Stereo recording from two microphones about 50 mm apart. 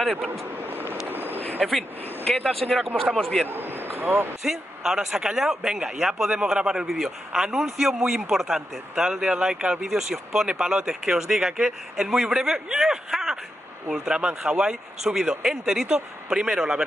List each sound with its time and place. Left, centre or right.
0.0 s speech: centre
0.3 s vehicle: right
1.0 s a sound: right
1.6 s speech: centre
3.4 s speech: right
4.4 s speech: centre